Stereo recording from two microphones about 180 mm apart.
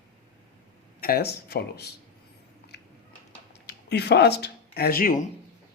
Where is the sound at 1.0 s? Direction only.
55° left (ahead or behind).